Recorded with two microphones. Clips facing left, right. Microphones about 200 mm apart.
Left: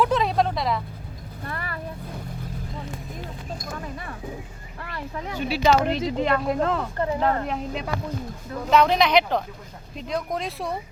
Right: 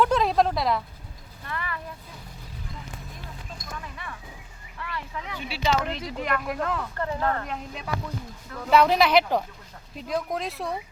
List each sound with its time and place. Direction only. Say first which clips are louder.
0.0 s a sound: even; centre (ahead or behind)
1.5 s vehicle: even; 40° left (ahead or behind)
3.6 s speech: left 5 dB; 45° left (ahead or behind)
5.9 s speech: left 6 dB; 30° left (ahead or behind)
8.7 s speech: left 1 dB; 5° right (ahead or behind)